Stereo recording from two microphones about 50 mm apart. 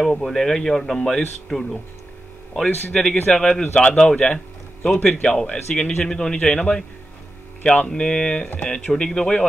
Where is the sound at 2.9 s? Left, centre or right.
Centre.